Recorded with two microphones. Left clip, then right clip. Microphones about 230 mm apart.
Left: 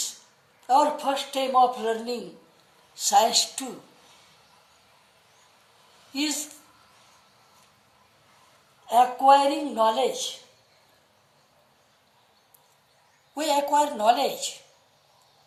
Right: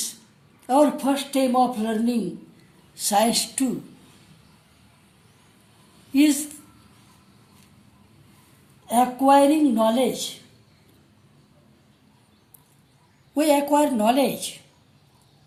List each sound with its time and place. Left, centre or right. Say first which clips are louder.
0.7 s speech: right 2 dB; right
6.1 s speech: right 9 dB; right
8.9 s speech: even; right
13.3 s speech: right 3 dB; right